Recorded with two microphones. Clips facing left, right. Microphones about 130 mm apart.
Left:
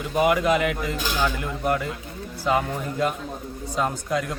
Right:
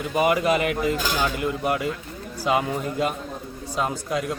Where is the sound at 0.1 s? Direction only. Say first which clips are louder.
Left 1 dB; 5° right (ahead or behind).